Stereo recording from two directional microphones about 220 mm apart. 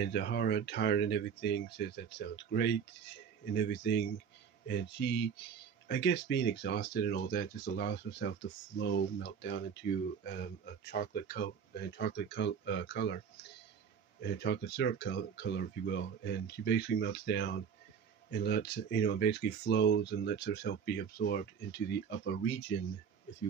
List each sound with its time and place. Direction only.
0.0 s speech: 50° left (ahead or behind)
14.2 s speech: 50° left (ahead or behind)